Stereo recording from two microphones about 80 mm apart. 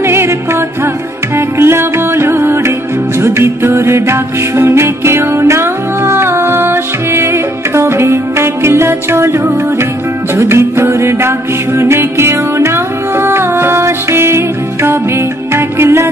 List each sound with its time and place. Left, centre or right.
0.0 s music: right
1.6 s music: right
10.3 s music: right